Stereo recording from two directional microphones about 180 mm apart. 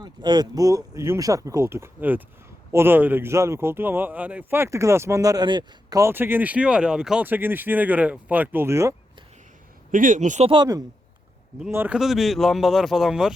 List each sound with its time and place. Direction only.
0.0 s speech: 25° right (ahead or behind)
9.9 s speech: 45° right (ahead or behind)
10.5 s speech: 20° right (ahead or behind)
11.7 s speech: 10° right (ahead or behind)